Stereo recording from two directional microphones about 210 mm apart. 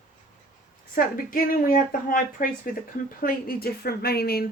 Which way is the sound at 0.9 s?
40° left (ahead or behind).